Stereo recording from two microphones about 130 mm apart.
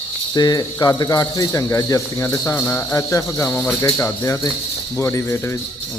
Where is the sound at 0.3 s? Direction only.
30° left (ahead or behind).